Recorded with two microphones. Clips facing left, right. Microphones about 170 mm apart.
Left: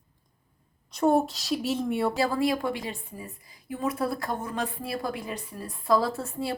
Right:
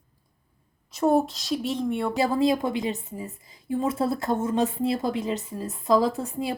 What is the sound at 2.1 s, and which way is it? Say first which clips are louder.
A woman's voice: right 3 dB; 20° right (ahead or behind).